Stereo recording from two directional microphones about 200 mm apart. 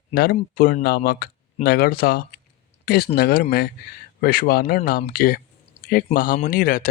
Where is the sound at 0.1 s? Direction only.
50° left (ahead or behind).